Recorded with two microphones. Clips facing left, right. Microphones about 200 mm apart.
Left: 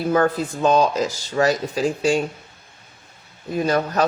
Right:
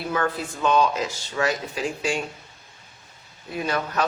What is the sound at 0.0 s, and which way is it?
A man's voice, 40° left (ahead or behind).